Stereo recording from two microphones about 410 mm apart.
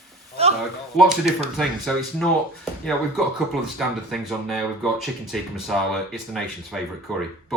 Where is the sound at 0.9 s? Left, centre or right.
Centre.